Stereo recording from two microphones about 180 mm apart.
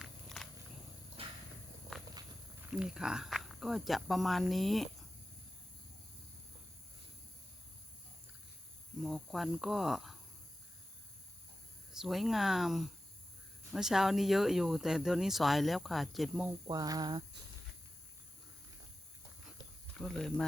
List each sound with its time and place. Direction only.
0.0 s walk: centre (ahead or behind)
1.2 s walk: 30° right (ahead or behind)
1.9 s walk: centre (ahead or behind)
2.7 s speech: 5° right (ahead or behind)
9.0 s speech: centre (ahead or behind)
11.9 s speech: centre (ahead or behind)
16.6 s speech: 20° right (ahead or behind)
19.9 s speech: 5° left (ahead or behind)